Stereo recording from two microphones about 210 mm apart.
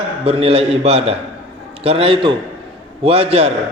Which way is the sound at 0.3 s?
30° right (ahead or behind).